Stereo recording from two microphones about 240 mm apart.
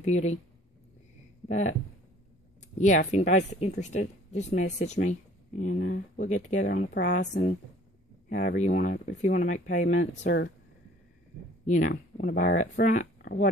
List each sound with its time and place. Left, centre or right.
0.0 s speech: left
1.5 s speech: left
2.8 s speech: left
8.3 s speech: left
11.6 s speech: left